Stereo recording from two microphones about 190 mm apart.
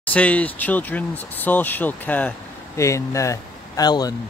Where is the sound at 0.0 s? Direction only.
5° left (ahead or behind).